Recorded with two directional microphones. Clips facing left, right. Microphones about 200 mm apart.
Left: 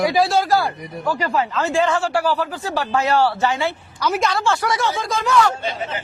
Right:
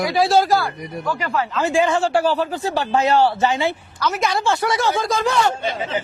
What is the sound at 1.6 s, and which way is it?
Speech, 15° right (ahead or behind).